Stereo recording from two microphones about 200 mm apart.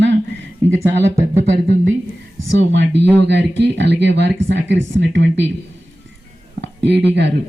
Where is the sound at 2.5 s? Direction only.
65° right (ahead or behind).